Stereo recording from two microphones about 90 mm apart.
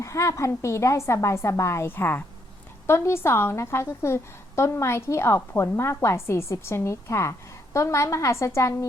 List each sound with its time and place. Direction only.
0.0 s a woman's voice: 35° left (ahead or behind)